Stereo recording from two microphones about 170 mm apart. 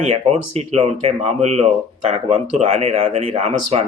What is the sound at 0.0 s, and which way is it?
Speech, 40° right (ahead or behind).